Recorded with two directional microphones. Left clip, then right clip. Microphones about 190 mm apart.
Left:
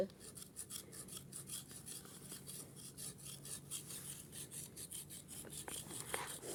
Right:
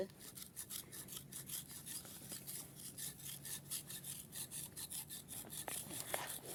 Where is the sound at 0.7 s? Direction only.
25° right (ahead or behind).